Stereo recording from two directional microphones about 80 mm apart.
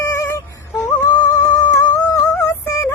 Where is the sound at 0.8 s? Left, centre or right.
Left.